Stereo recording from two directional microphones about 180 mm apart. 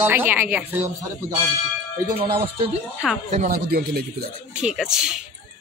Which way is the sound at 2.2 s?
30° right (ahead or behind).